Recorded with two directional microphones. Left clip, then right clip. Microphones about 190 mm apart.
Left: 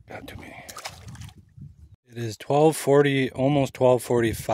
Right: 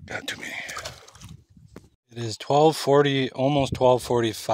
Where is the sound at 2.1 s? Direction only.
20° left (ahead or behind).